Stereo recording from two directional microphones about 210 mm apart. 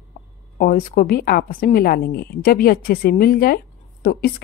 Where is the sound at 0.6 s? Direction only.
45° left (ahead or behind).